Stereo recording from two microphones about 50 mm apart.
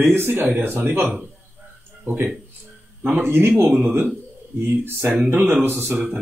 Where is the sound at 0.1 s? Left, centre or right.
Right.